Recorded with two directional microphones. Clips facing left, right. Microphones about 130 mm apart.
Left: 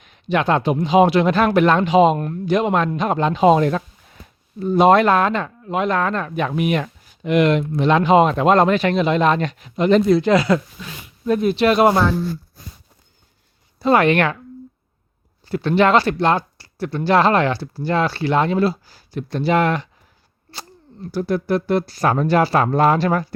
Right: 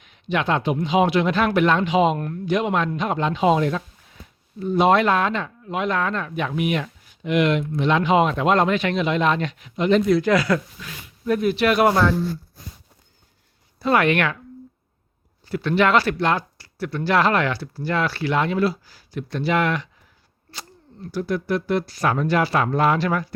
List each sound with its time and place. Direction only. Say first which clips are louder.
0.0 s speech: left 4 dB; 40° left (ahead or behind)
2.1 s speech: left 3 dB; 25° left (ahead or behind)
2.5 s speech: left 4 dB; 35° left (ahead or behind)
13.7 s speech: left 4 dB; 30° left (ahead or behind)
15.4 s speech: left 3 dB; 30° left (ahead or behind)
21.1 s speech: left 3 dB; 35° left (ahead or behind)